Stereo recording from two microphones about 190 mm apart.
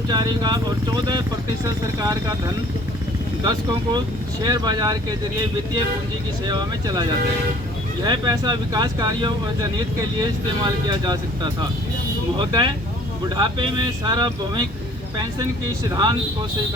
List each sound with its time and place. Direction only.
0.1 s speech: 20° right (ahead or behind)
3.4 s speech: 20° right (ahead or behind)
6.4 s speech: 20° right (ahead or behind)
10.8 s speech: 20° right (ahead or behind)
12.4 s speech: 20° right (ahead or behind)